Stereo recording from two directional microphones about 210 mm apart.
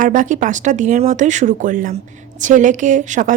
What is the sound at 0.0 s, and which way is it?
Speech, 40° right (ahead or behind).